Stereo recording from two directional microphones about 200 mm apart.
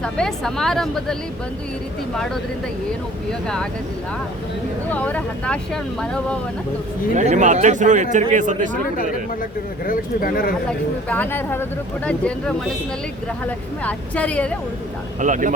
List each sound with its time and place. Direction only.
0.0 s speech: 5° left (ahead or behind)
3.4 s speech: 5° left (ahead or behind)
4.9 s speech: 5° left (ahead or behind)
7.2 s speech: 40° right (ahead or behind)
9.8 s speech: 45° left (ahead or behind)
10.7 s speech: 10° left (ahead or behind)
13.8 s speech: 5° left (ahead or behind)
15.2 s speech: 40° right (ahead or behind)